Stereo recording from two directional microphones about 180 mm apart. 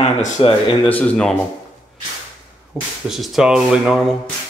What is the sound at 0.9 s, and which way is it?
Speech, 5° left (ahead or behind).